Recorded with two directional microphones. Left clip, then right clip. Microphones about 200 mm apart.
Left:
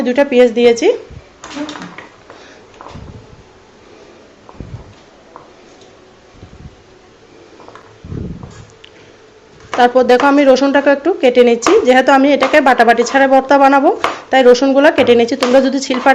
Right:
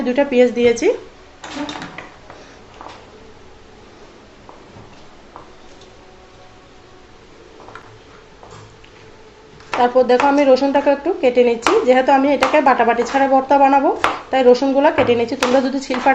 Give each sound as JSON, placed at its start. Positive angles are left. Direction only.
{"t": 0.0, "sound": "a woman's voice", "side_deg": 20}
{"t": 9.8, "sound": "speech", "side_deg": 35}